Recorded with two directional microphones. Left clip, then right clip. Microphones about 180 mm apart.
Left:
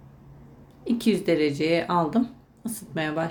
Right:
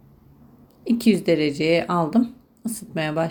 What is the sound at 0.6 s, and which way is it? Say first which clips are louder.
Speech: right 4 dB; 20° right (ahead or behind).